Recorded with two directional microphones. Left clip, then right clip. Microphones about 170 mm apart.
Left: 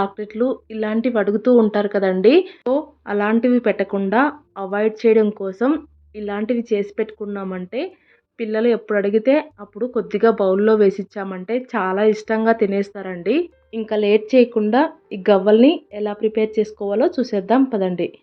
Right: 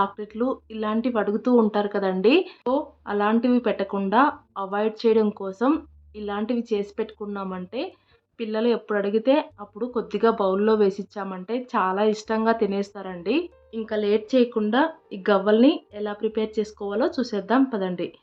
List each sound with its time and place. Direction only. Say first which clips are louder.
0.0 s speech: left 4 dB; 15° left (ahead or behind)